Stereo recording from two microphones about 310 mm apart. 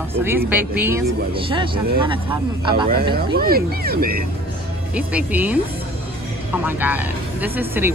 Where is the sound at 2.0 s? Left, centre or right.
Centre.